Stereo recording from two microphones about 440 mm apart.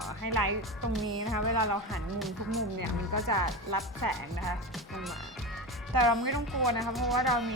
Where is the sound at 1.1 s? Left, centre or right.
Right.